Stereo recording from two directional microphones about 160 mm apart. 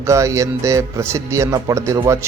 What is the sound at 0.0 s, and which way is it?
Speech, 20° right (ahead or behind).